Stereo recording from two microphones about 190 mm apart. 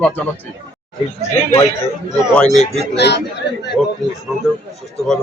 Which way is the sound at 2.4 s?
35° left (ahead or behind).